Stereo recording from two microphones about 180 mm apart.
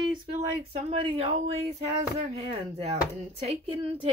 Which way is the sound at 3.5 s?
30° right (ahead or behind).